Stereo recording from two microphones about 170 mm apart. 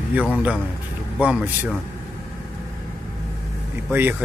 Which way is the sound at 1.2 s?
10° right (ahead or behind).